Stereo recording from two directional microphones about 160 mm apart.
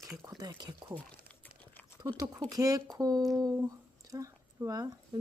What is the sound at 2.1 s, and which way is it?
Speech, 25° right (ahead or behind).